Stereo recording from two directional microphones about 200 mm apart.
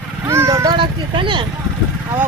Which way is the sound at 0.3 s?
15° right (ahead or behind).